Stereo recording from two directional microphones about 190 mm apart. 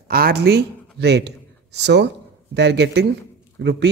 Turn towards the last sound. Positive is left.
turn(degrees=-65)  # may be behind; listen again after turning